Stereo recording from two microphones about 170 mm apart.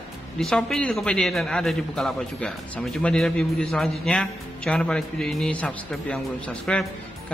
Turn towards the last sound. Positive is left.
turn(degrees=5)  # may be behind; listen again after turning